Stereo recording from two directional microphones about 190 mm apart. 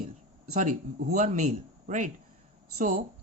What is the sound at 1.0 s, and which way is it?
A man's voice, 40° right (ahead or behind).